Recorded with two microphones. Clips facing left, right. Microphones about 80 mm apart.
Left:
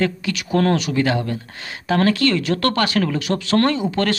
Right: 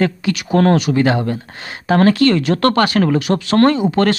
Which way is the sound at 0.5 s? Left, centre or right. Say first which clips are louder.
Right 5 dB; right.